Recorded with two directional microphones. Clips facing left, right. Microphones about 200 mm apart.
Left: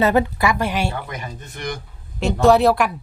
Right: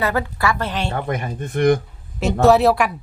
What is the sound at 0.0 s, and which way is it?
Speech, 20° left (ahead or behind).